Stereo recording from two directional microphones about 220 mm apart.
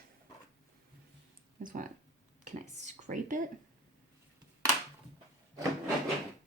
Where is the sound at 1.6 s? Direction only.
35° right (ahead or behind).